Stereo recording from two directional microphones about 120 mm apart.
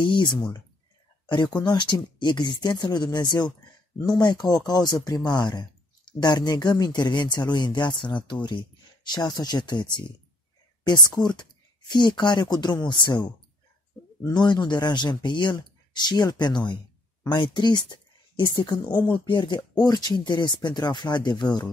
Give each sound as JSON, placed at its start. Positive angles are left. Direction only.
{"t": 0.0, "sound": "speech", "side_deg": 40}
{"t": 1.6, "sound": "speech", "side_deg": 35}
{"t": 14.2, "sound": "speech", "side_deg": 35}